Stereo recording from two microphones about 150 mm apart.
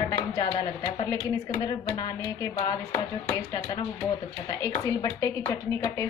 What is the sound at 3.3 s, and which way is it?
Speech, 20° left (ahead or behind).